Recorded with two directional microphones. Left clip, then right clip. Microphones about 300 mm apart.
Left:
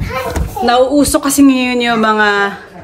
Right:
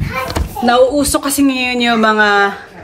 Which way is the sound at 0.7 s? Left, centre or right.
Centre.